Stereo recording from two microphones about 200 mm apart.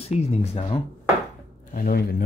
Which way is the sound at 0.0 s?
30° left (ahead or behind).